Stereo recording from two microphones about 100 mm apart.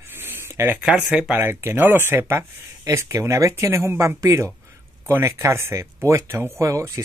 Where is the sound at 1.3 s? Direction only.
20° right (ahead or behind).